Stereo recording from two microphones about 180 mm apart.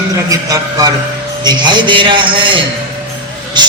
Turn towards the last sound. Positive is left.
turn(degrees=-25)  # may be behind; listen again after turning